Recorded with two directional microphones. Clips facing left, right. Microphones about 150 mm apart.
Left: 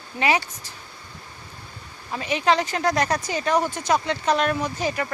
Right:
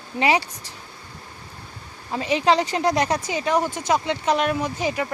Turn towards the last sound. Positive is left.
turn(degrees=-15)  # may be behind; listen again after turning